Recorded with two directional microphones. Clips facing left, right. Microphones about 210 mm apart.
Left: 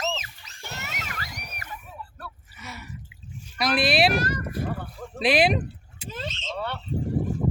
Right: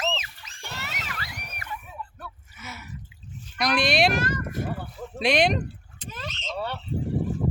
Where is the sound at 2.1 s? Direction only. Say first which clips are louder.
Even; centre (ahead or behind).